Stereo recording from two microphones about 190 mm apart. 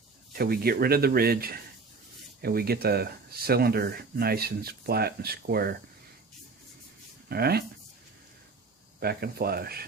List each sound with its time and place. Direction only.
0.3 s speech: 55° right (ahead or behind)
7.3 s speech: 55° right (ahead or behind)
9.0 s speech: 55° right (ahead or behind)